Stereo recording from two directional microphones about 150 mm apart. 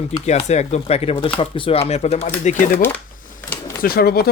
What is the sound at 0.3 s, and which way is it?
Speech, 45° left (ahead or behind).